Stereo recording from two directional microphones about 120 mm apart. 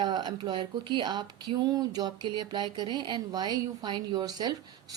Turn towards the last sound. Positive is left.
turn(degrees=-35)  # may be behind; listen again after turning